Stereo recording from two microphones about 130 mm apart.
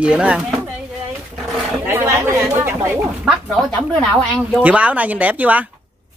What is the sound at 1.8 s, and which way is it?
Speech, 20° right (ahead or behind).